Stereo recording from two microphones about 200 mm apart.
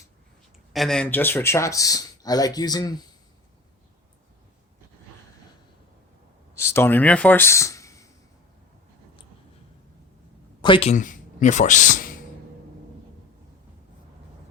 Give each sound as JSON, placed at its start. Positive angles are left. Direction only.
{"t": 0.7, "sound": "speech", "side_deg": 0}
{"t": 6.5, "sound": "speech", "side_deg": 15}
{"t": 10.6, "sound": "speech", "side_deg": 25}